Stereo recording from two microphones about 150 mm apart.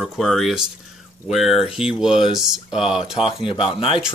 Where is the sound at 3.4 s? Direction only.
35° left (ahead or behind).